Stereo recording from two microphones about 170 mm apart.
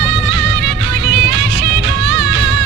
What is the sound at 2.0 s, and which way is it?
Music, 90° right.